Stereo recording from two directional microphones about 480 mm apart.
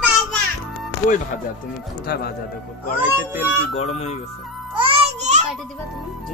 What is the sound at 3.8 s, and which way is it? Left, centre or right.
Speech, centre.